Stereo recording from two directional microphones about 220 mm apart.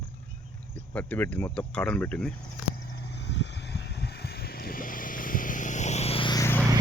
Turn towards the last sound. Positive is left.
turn(degrees=15)  # may be behind; listen again after turning